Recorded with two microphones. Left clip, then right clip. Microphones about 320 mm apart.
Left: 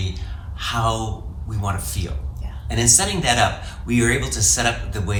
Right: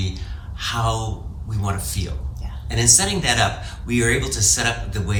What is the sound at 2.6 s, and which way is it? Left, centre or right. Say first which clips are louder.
Speech: right 1 dB; centre.